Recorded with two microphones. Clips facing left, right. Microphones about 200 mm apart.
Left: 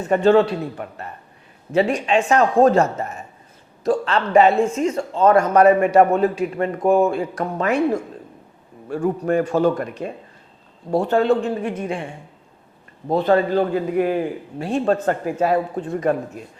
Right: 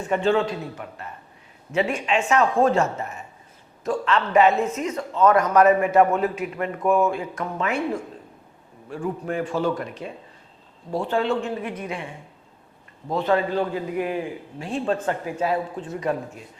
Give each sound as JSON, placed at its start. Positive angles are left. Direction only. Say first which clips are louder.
{"t": 0.1, "sound": "speech", "louder": "left 6 dB", "side_deg": 40}
{"t": 1.7, "sound": "speech", "louder": "left 5 dB", "side_deg": 35}
{"t": 13.1, "sound": "speech", "louder": "left 5 dB", "side_deg": 35}
{"t": 13.5, "sound": "speech", "louder": "left 5 dB", "side_deg": 45}